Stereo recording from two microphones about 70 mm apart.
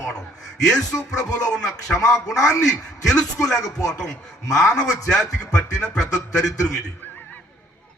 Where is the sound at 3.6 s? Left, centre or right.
Left.